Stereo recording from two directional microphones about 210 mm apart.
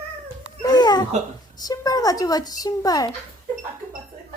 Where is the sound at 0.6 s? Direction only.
20° left (ahead or behind).